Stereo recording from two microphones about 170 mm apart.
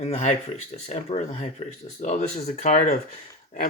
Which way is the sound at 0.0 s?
45° left (ahead or behind).